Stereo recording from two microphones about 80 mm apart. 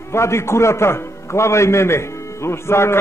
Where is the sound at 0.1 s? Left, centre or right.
Left.